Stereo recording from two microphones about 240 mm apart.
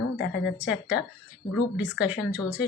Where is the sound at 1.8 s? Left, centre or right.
Centre.